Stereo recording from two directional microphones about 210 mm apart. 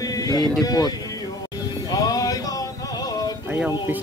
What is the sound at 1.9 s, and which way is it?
Music, 15° left (ahead or behind).